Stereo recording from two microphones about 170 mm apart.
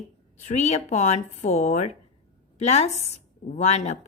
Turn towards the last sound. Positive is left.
turn(degrees=40)  # may be behind; listen again after turning